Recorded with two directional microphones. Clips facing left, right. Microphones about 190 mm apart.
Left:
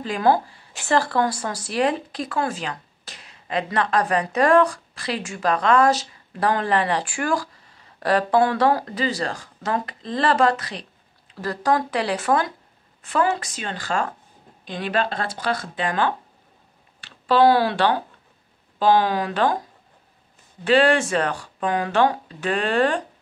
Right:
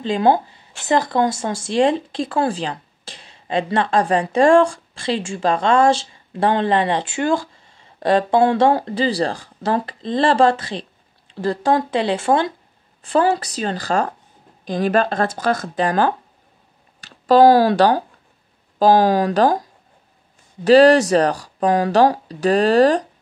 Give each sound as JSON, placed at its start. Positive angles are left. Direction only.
{"t": 0.0, "sound": "a woman's voice", "side_deg": -25}
{"t": 20.6, "sound": "speech", "side_deg": -40}